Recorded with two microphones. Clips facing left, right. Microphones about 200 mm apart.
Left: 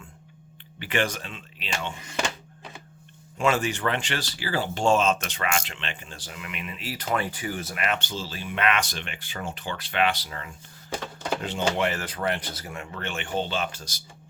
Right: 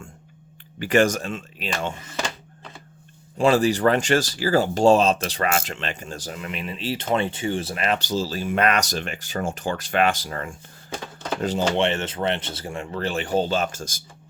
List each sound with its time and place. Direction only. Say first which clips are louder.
0.8 s speech: right 8 dB; 45° right (ahead or behind)
3.3 s speech: right 6 dB; 35° right (ahead or behind)
11.4 s speech: right 5 dB; 30° right (ahead or behind); by 14.0 s 45° right (ahead or behind)